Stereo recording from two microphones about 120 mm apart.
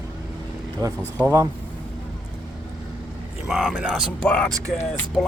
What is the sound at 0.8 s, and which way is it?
Speech, 30° right (ahead or behind).